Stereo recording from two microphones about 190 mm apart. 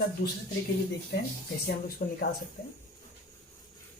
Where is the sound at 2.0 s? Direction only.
50° left (ahead or behind).